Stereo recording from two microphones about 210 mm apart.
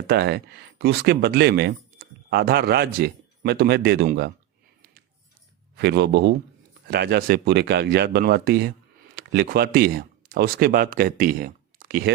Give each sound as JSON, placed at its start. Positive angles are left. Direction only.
{"t": 0.1, "sound": "speech", "side_deg": -50}
{"t": 5.7, "sound": "speech", "side_deg": -55}